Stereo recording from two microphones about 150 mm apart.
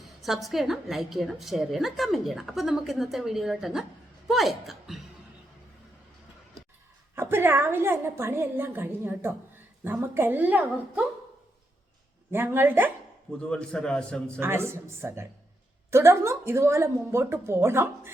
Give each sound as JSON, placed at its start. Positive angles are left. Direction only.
{"t": 0.2, "sound": "a woman's voice", "side_deg": 0}
{"t": 7.2, "sound": "a woman's voice", "side_deg": -15}
{"t": 12.3, "sound": "a woman's voice", "side_deg": -15}
{"t": 13.5, "sound": "a woman's voice", "side_deg": 5}
{"t": 14.3, "sound": "a woman's voice", "side_deg": -15}